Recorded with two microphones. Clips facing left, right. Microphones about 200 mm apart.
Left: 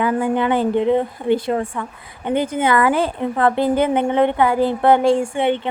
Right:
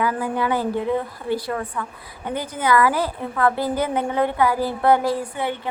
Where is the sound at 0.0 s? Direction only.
25° left (ahead or behind).